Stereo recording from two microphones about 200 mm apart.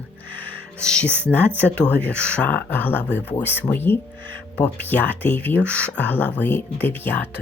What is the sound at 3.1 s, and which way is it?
Speech, 60° left (ahead or behind).